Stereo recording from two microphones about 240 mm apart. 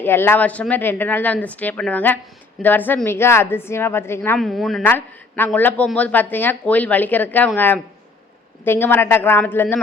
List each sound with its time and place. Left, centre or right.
0.0 s a woman's voice: centre